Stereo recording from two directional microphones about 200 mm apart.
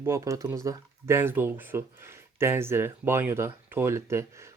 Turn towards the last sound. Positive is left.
turn(degrees=-15)  # may be behind; listen again after turning